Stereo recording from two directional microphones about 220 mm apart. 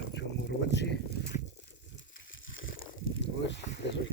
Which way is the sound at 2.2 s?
60° left (ahead or behind).